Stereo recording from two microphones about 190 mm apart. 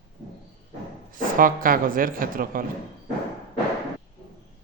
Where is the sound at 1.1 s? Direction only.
45° right (ahead or behind).